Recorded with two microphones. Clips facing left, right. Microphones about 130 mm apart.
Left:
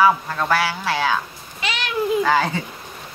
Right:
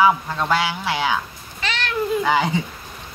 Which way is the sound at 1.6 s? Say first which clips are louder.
Even; 15° left (ahead or behind).